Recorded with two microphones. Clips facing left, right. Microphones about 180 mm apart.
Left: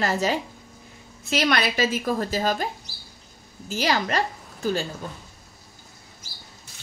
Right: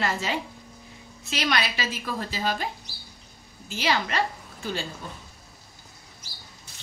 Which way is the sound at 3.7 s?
40° left (ahead or behind).